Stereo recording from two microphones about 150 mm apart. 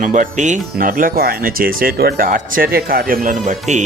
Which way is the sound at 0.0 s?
60° right (ahead or behind).